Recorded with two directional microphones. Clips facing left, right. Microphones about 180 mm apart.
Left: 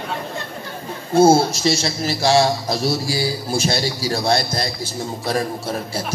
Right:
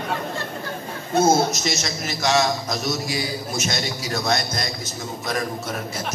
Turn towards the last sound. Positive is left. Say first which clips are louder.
# left 4 dB
turn(degrees=30)  # may be behind; listen again after turning